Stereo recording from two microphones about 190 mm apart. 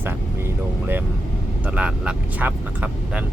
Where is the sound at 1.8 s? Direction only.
5° right (ahead or behind).